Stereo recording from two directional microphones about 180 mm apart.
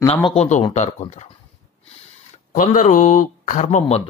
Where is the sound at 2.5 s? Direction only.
45° left (ahead or behind).